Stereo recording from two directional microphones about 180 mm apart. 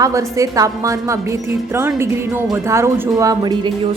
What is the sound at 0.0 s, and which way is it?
A woman's voice, 15° right (ahead or behind).